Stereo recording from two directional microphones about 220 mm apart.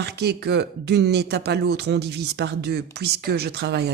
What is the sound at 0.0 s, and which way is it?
Speech, 50° right (ahead or behind).